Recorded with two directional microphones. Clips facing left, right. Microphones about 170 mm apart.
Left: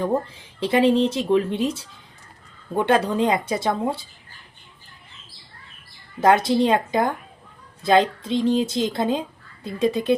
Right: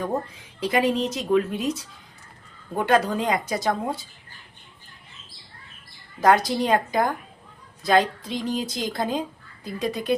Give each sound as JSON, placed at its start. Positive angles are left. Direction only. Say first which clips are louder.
{"t": 0.0, "sound": "speech", "louder": "left 4 dB", "side_deg": 30}
{"t": 6.1, "sound": "speech", "louder": "left 2 dB", "side_deg": 25}